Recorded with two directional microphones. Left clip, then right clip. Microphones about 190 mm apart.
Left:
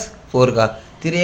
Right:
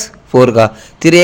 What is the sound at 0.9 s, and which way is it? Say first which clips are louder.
Speech: right 14 dB; 60° right (ahead or behind).